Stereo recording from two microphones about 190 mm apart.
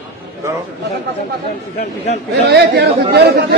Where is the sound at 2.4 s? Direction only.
60° right (ahead or behind).